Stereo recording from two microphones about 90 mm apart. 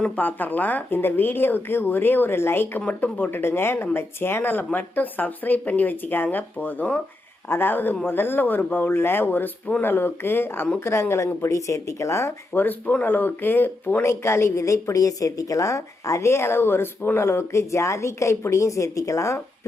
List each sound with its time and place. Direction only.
0.2 s speech: 20° left (ahead or behind)
12.6 s speech: 15° left (ahead or behind); by 19.4 s 35° left (ahead or behind)